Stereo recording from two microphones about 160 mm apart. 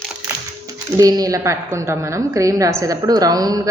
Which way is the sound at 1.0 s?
20° right (ahead or behind).